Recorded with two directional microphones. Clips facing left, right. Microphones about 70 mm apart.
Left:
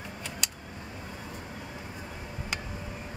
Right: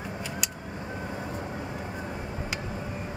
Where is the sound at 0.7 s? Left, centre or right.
Right.